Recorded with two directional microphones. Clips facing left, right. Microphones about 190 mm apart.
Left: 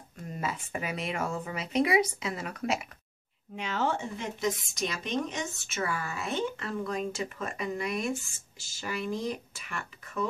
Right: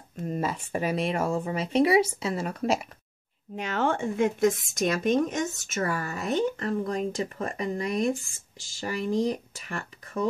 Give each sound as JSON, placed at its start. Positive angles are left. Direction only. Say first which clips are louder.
{"t": 0.4, "sound": "speech", "louder": "right 4 dB", "side_deg": -35}
{"t": 3.5, "sound": "speech", "louder": "right 4 dB", "side_deg": -50}